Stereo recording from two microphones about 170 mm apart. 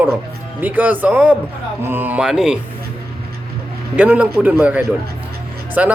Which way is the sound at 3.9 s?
10° right (ahead or behind).